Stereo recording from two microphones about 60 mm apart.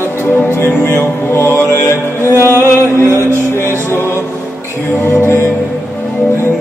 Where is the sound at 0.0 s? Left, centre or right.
Left.